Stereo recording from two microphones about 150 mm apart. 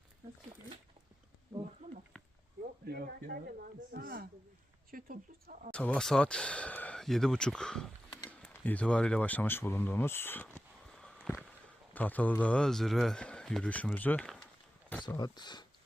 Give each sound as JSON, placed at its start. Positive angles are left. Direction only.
{"t": 2.8, "sound": "speech", "side_deg": -85}
{"t": 5.7, "sound": "speech", "side_deg": 10}
{"t": 11.9, "sound": "speech", "side_deg": 10}
{"t": 15.0, "sound": "speech", "side_deg": 30}